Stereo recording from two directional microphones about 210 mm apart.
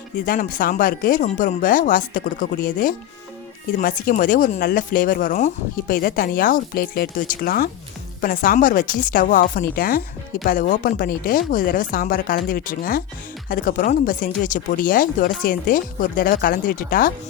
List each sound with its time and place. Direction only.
0.3 s speech: 40° left (ahead or behind)